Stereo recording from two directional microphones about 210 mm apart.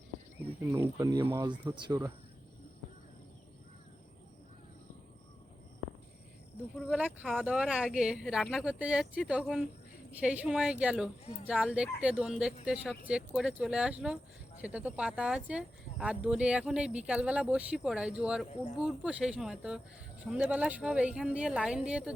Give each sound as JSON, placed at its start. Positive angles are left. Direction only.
{"t": 0.7, "sound": "speech", "side_deg": -15}
{"t": 6.7, "sound": "speech", "side_deg": -5}